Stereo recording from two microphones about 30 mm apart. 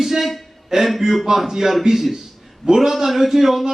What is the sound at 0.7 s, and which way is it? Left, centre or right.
A man's voice, right.